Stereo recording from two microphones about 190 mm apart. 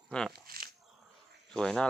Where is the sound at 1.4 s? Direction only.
Centre (ahead or behind).